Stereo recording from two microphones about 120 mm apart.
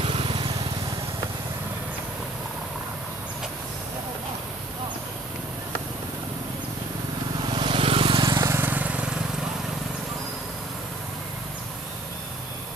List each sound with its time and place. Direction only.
0.0 s lawn mower: 50° right (ahead or behind)
7.4 s vehicle: 45° right (ahead or behind)
8.3 s vehicle: 30° right (ahead or behind)
8.5 s vehicle: 15° right (ahead or behind)